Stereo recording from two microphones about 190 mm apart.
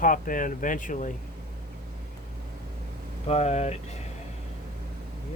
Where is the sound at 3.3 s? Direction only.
35° left (ahead or behind).